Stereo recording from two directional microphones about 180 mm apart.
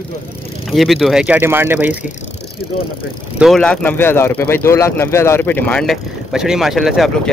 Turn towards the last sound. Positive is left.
turn(degrees=0)  # may be behind; listen again after turning